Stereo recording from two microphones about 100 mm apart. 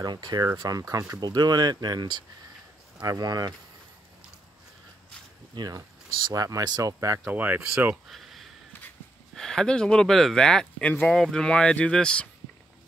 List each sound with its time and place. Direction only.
0.0 s speech: 45° right (ahead or behind)
5.5 s speech: 40° right (ahead or behind)
7.2 s speech: 15° right (ahead or behind)
8.1 s a sound: centre (ahead or behind)
9.3 s speech: 5° left (ahead or behind)